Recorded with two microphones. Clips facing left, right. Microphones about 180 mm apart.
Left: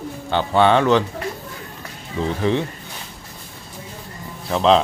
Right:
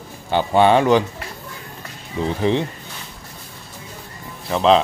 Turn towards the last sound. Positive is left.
turn(degrees=0)  # may be behind; listen again after turning